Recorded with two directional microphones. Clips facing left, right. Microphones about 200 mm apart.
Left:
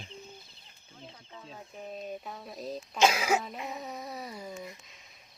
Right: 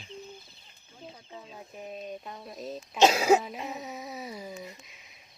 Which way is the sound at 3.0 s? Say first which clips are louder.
Right 5 dB; 35° right (ahead or behind).